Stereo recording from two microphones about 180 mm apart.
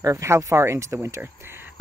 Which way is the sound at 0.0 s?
15° right (ahead or behind).